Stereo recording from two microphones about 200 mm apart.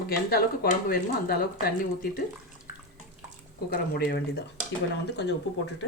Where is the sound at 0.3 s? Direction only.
50° left (ahead or behind).